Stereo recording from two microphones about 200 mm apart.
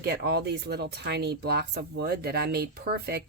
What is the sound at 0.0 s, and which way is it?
Speech, 55° right (ahead or behind).